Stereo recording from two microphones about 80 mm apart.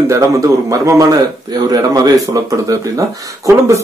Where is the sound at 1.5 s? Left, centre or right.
Right.